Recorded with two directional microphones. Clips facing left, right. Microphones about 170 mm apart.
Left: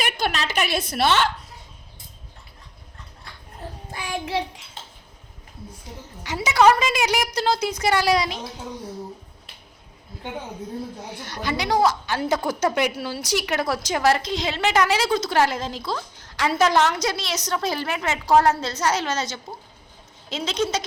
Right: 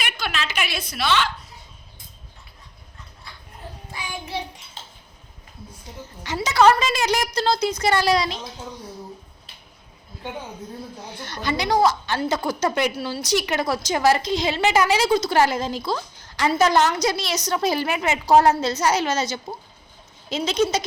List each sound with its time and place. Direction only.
0.0 s a woman's voice: 40° left (ahead or behind)
4.1 s child singing: 90° left
6.2 s a woman's voice: 10° left (ahead or behind)
11.2 s a woman's voice: 10° left (ahead or behind)